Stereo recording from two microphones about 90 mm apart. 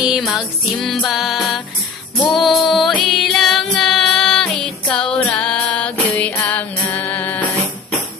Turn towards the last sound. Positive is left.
turn(degrees=20)  # may be behind; listen again after turning